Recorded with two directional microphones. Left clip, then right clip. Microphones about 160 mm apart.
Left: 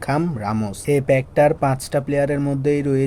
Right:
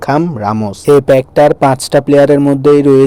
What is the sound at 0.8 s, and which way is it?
A man's voice, 45° right (ahead or behind).